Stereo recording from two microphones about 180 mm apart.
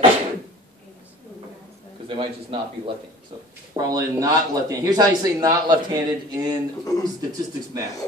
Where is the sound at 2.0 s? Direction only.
30° right (ahead or behind).